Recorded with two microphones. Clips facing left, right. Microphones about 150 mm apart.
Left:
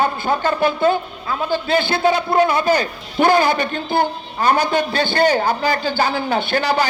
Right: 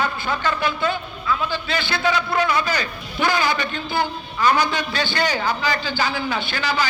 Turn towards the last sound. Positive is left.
turn(degrees=60)  # may be behind; listen again after turning